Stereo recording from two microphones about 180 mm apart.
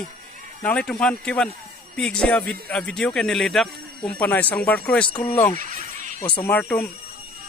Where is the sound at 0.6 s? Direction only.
5° left (ahead or behind).